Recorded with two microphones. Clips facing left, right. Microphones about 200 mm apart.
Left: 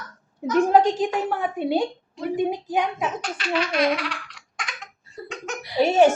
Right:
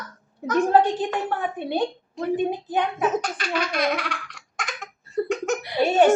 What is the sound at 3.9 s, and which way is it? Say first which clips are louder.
Laughter: left 1 dB; 45° right (ahead or behind).